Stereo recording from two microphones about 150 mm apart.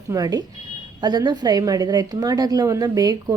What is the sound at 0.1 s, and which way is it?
A woman's voice, 25° right (ahead or behind).